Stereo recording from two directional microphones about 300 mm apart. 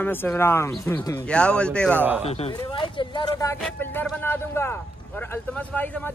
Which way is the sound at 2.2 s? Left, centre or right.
Centre.